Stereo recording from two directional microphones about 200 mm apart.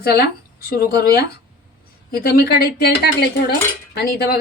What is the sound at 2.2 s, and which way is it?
Speech, 50° left (ahead or behind).